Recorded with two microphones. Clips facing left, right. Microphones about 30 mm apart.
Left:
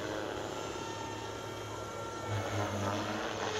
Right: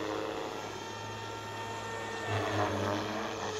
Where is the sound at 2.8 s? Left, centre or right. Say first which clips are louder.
Right 2 dB; centre.